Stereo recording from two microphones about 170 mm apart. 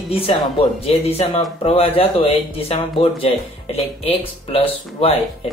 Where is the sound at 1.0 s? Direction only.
35° left (ahead or behind).